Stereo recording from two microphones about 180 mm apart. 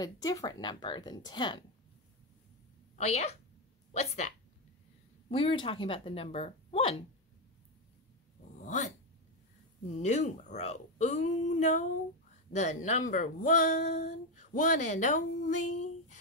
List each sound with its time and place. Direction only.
0.0 s speech: 20° left (ahead or behind)
3.0 s speech: 40° left (ahead or behind)
5.3 s speech: 30° left (ahead or behind)
8.5 s dog: 40° left (ahead or behind)
9.8 s speech: 40° left (ahead or behind)